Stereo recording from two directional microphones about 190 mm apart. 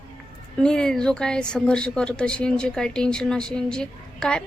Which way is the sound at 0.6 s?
5° left (ahead or behind).